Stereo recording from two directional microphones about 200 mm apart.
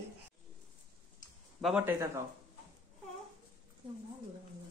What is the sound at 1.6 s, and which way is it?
Speech, 10° right (ahead or behind).